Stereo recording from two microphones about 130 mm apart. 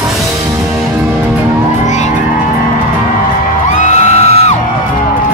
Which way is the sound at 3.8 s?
65° left (ahead or behind).